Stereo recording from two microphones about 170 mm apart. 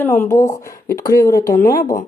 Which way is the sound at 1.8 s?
50° left (ahead or behind).